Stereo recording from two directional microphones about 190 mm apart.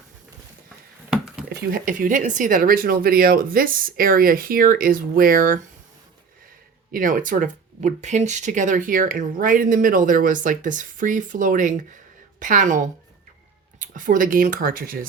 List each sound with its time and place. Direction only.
1.1 s a sound: 5° right (ahead or behind)
1.5 s speech: 50° right (ahead or behind)
6.9 s speech: 45° right (ahead or behind)